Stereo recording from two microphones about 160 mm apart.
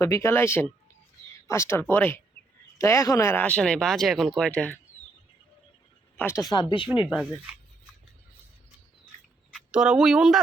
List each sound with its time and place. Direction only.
0.0 s speech: 20° left (ahead or behind)
6.1 s speech: 15° left (ahead or behind)
7.0 s speech: 5° right (ahead or behind)
9.5 s speech: 5° right (ahead or behind)